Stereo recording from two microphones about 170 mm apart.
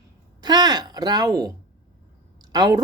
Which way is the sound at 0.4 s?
25° right (ahead or behind).